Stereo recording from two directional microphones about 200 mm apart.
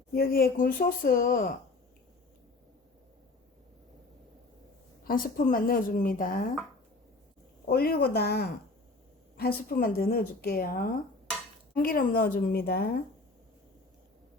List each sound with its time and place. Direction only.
0.1 s speech: 50° left (ahead or behind)
5.0 s speech: 45° left (ahead or behind)
7.7 s speech: 50° left (ahead or behind)